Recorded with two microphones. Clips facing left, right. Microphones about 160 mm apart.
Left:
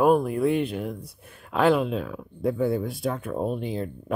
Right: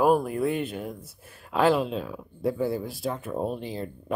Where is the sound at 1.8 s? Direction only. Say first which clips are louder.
Left 2 dB; 35° right (ahead or behind).